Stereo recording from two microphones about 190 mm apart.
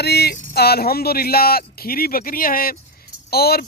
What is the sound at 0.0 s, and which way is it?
Speech, 60° left (ahead or behind).